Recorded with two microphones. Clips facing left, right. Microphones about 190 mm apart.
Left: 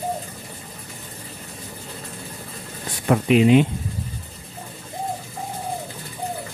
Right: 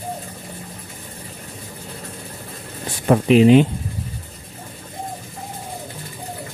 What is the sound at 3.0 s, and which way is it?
Speech, 35° right (ahead or behind).